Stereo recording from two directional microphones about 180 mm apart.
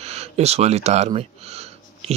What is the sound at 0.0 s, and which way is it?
Speech, 35° right (ahead or behind).